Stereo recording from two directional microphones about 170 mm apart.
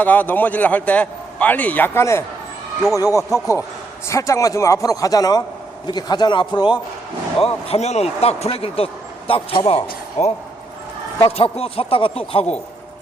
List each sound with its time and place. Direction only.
0.0 s a man's voice: 10° left (ahead or behind); by 6.7 s 25° left (ahead or behind)
7.4 s speech: 40° left (ahead or behind)